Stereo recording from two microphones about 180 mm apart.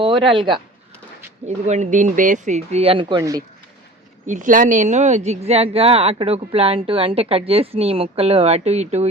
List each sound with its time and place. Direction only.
0.0 s speech: 30° right (ahead or behind)
1.5 s speech: 40° right (ahead or behind); by 3.4 s 20° right (ahead or behind)
4.3 s speech: 45° right (ahead or behind)